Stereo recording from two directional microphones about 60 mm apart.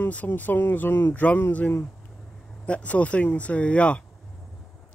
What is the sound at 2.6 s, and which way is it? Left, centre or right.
Speech, left.